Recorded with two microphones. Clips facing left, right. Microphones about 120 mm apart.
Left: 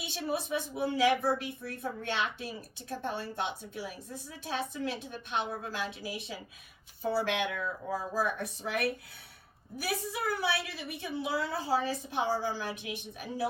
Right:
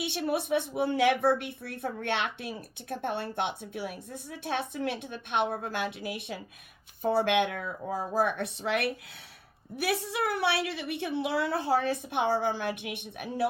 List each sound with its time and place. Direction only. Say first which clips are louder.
0.0 s a woman's voice: right 4 dB; 65° right (ahead or behind)